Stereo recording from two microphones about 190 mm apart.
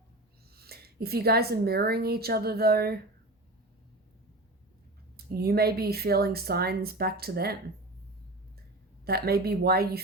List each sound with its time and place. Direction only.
0.5 s a woman's voice: 55° right (ahead or behind)
5.1 s a woman's voice: 55° right (ahead or behind)
9.0 s a woman's voice: 55° right (ahead or behind)